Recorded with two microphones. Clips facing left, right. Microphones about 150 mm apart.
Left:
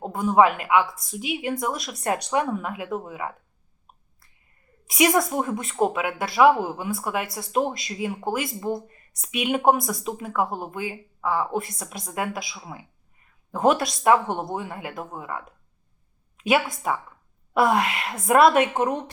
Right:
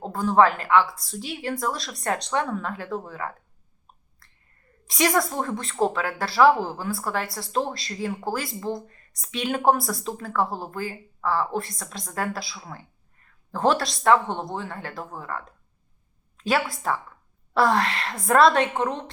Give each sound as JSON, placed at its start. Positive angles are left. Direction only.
{"t": 0.0, "sound": "a woman's voice", "side_deg": 15}
{"t": 4.9, "sound": "speech", "side_deg": 5}
{"t": 6.5, "sound": "speech", "side_deg": 0}
{"t": 6.7, "sound": "speech", "side_deg": 15}
{"t": 7.0, "sound": "speech", "side_deg": 5}
{"t": 8.9, "sound": "speech", "side_deg": 15}
{"t": 12.5, "sound": "a sound", "side_deg": 5}
{"t": 14.0, "sound": "speech", "side_deg": 15}
{"t": 16.5, "sound": "speech", "side_deg": 20}
{"t": 17.6, "sound": "speech", "side_deg": 5}